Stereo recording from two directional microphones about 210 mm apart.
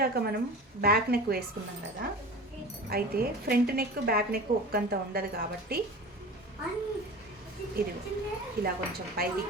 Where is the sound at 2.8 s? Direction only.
45° right (ahead or behind).